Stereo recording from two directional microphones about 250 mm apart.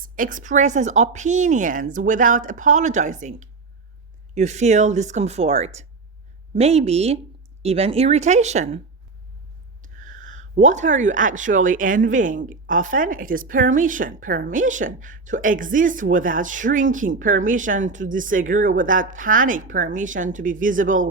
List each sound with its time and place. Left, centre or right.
0.2 s a woman's voice: right
9.8 s a woman's voice: right